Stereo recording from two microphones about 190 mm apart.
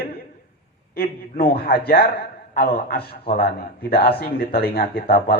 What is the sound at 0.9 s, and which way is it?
A man's voice, 55° left (ahead or behind).